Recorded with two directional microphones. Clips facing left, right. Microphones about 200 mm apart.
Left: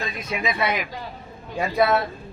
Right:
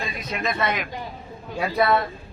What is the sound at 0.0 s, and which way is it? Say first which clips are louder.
Speech: left 1 dB; centre (ahead or behind).